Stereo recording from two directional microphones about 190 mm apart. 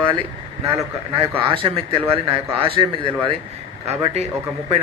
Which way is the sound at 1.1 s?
30° right (ahead or behind).